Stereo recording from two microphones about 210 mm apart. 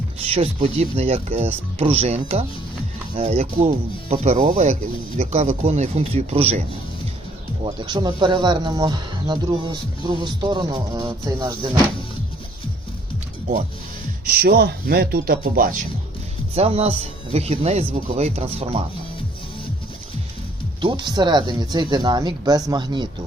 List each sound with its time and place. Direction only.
0.3 s speech: 30° right (ahead or behind)
7.6 s speech: 20° right (ahead or behind)
14.3 s speech: 45° right (ahead or behind)
16.6 s speech: 30° right (ahead or behind)
20.8 s speech: 20° right (ahead or behind)